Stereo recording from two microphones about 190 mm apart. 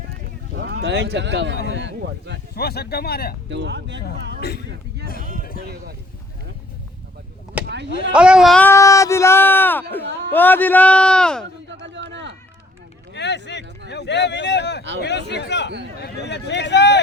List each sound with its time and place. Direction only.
0.5 s speech: 60° right (ahead or behind)
2.6 s speech: 55° left (ahead or behind)
3.5 s speech: 65° right (ahead or behind)
4.4 s speech: 60° left (ahead or behind)
7.6 s chop: 5° right (ahead or behind)
8.1 s speech: 5° right (ahead or behind)
11.7 s a sound: 70° right (ahead or behind)
13.1 s speech: 65° left (ahead or behind)